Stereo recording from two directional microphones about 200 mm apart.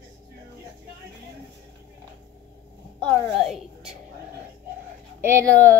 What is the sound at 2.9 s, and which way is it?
A woman's voice, centre (ahead or behind).